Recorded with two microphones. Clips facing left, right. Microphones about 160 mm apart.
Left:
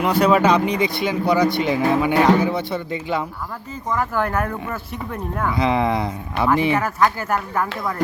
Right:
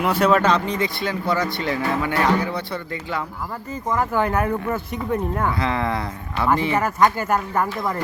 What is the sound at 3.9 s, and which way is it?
Speech, 10° right (ahead or behind).